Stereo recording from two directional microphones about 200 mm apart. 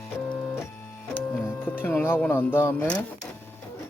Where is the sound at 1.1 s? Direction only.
10° left (ahead or behind).